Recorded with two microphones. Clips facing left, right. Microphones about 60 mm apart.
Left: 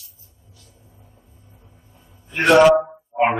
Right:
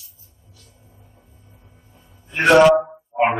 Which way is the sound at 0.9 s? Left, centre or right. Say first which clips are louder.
Even; centre.